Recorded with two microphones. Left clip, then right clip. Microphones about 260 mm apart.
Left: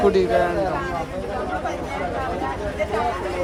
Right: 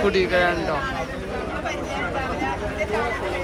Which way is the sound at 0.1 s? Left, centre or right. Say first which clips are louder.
Left 1 dB; centre.